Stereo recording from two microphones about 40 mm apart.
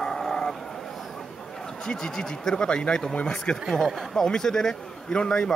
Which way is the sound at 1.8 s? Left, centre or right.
Centre.